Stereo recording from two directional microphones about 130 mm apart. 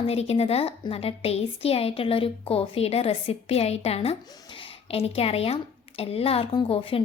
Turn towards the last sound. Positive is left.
turn(degrees=45)  # may be behind; listen again after turning